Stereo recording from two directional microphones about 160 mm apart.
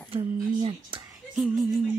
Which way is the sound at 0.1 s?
30° right (ahead or behind).